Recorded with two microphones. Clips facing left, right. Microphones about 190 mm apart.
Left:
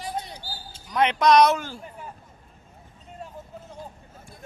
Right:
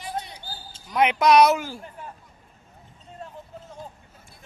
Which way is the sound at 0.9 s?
10° right (ahead or behind).